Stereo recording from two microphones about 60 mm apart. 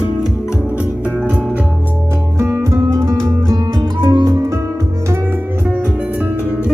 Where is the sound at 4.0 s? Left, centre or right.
Right.